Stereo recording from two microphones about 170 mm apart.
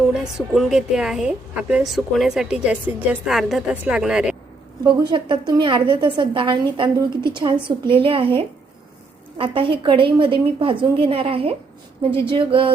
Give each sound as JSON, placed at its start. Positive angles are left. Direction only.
{"t": 0.1, "sound": "a woman's voice", "side_deg": 0}
{"t": 4.8, "sound": "a woman's voice", "side_deg": -25}